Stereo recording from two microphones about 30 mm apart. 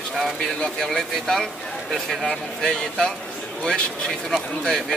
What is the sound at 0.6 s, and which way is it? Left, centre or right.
Speech, left.